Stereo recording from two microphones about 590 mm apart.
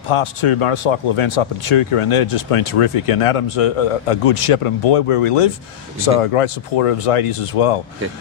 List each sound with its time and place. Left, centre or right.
0.1 s speech: left